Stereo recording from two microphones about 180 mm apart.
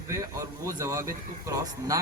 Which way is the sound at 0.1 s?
20° right (ahead or behind).